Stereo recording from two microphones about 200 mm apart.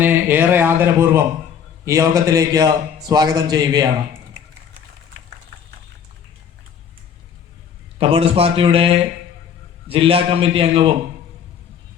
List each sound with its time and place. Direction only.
0.0 s speech: 10° right (ahead or behind)
7.9 s speech: 30° right (ahead or behind)